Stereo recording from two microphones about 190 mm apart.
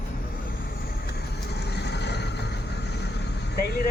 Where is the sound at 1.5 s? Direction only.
60° left (ahead or behind).